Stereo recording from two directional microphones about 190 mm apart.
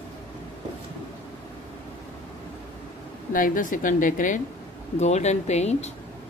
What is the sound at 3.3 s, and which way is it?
A woman's voice, 45° left (ahead or behind).